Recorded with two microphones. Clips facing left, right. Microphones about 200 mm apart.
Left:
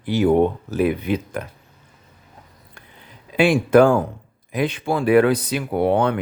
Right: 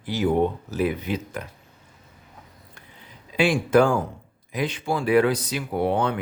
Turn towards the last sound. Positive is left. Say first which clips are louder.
# left 5 dB
turn(degrees=60)  # may be behind; listen again after turning